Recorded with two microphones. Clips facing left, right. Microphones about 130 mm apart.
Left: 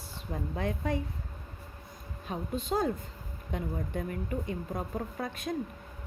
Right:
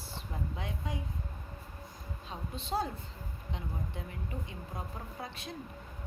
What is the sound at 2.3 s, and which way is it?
Speech, 45° left (ahead or behind).